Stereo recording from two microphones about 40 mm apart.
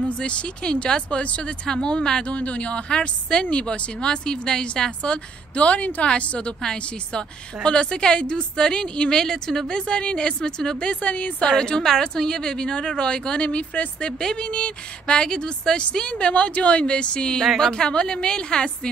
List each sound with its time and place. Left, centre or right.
0.2 s a woman's voice: left
1.2 s a woman's voice: left
1.7 s a woman's voice: left
2.3 s a woman's voice: left
5.1 s a woman's voice: left
6.6 s a woman's voice: centre
9.1 s a woman's voice: centre
9.7 s a woman's voice: left
11.0 s a woman's voice: left
11.4 s a woman's voice: centre